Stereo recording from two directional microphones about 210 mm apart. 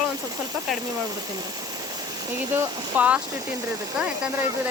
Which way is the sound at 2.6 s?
10° right (ahead or behind).